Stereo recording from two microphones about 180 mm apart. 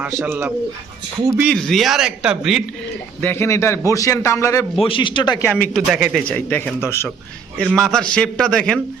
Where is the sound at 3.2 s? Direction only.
15° left (ahead or behind).